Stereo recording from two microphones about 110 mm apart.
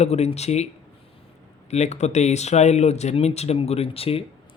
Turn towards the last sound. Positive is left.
turn(degrees=60)  # may be behind; listen again after turning